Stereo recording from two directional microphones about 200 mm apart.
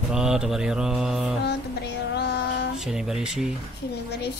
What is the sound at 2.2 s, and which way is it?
Child singing, 60° left (ahead or behind).